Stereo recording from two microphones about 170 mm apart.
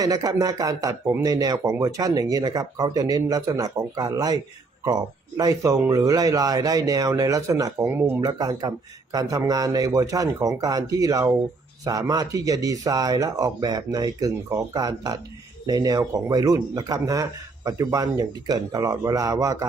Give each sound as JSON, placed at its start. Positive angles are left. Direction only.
{"t": 0.0, "sound": "speech", "side_deg": -20}
{"t": 5.4, "sound": "speech", "side_deg": -20}